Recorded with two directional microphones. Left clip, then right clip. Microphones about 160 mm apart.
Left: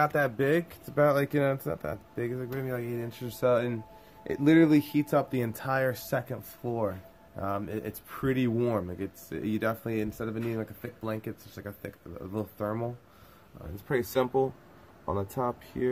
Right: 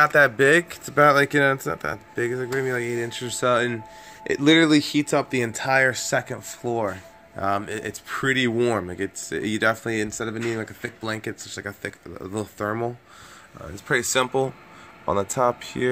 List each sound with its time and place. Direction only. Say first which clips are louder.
0.0 s speech: right 10 dB; 10° right (ahead or behind)
6.1 s speech: right 7 dB; 15° right (ahead or behind)